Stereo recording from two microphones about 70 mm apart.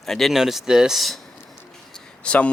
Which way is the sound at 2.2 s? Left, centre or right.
Centre.